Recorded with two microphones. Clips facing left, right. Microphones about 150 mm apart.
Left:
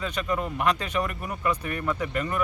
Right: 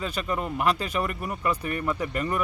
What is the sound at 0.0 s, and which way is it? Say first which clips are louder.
Speech: left 1 dB; 35° right (ahead or behind).